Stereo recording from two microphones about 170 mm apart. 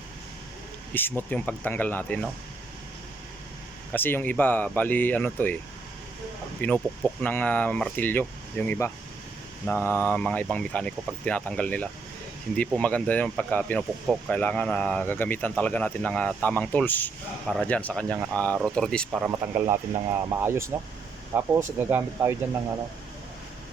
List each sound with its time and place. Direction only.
0.9 s speech: 10° left (ahead or behind)
3.9 s speech: 10° left (ahead or behind)
6.6 s speech: 5° left (ahead or behind)
19.3 s speech: 10° right (ahead or behind)